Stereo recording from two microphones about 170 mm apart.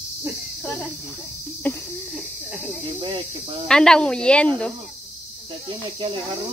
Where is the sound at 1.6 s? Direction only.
10° left (ahead or behind).